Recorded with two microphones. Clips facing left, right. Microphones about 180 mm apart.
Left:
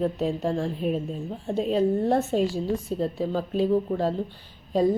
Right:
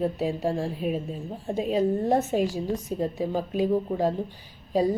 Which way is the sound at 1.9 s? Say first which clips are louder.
Left 1 dB; 15° right (ahead or behind).